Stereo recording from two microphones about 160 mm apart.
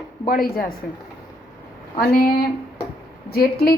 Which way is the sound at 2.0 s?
65° left (ahead or behind).